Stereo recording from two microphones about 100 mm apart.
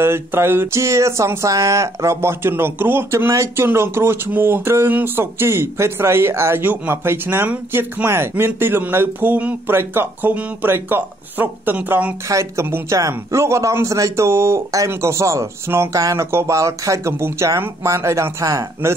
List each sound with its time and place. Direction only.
0.0 s speech: 25° right (ahead or behind)
12.3 s speech: 30° right (ahead or behind)